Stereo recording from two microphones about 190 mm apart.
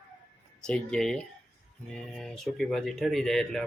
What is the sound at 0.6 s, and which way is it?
Speech, 5° left (ahead or behind).